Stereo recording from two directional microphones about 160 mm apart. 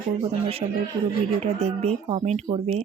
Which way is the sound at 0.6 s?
35° right (ahead or behind).